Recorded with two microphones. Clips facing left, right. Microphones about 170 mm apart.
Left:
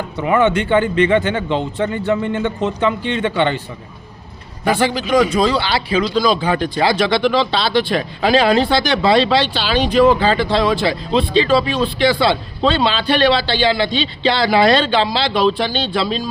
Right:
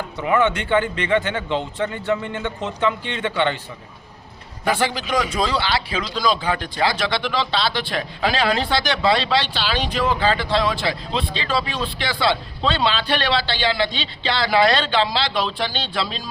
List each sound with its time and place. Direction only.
0.3 s speech: 20° left (ahead or behind)
5.1 s speech: 25° left (ahead or behind)
5.6 s a man's voice: 10° left (ahead or behind)